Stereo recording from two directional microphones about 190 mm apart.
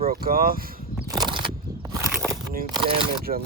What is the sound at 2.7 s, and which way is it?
Speech, 25° right (ahead or behind).